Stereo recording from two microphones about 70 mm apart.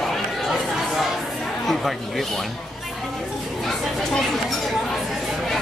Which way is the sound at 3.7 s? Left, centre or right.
Centre.